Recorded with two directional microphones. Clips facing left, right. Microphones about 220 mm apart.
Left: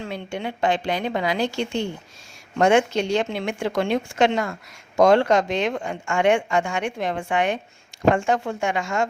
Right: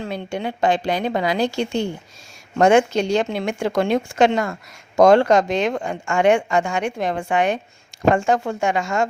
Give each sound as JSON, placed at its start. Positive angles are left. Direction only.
{"t": 0.1, "sound": "speech", "side_deg": -40}